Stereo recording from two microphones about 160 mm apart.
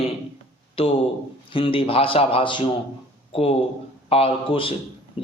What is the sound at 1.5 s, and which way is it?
Speech, 35° left (ahead or behind).